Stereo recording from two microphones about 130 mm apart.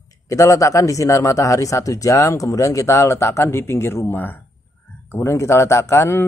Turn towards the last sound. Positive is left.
turn(degrees=20)  # may be behind; listen again after turning